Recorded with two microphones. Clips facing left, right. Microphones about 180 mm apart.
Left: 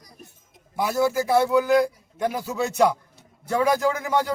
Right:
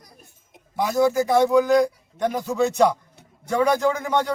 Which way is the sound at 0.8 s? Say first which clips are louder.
Right 3 dB; 10° left (ahead or behind).